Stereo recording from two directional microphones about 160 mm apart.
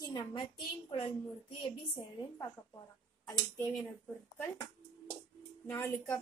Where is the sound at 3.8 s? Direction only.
10° left (ahead or behind).